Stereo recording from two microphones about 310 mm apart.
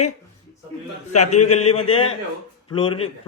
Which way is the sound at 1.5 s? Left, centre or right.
Left.